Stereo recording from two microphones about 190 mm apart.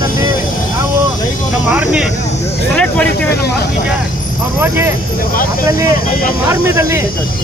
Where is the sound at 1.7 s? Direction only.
5° right (ahead or behind).